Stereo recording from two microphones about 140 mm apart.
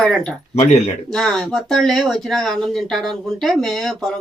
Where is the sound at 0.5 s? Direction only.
55° left (ahead or behind).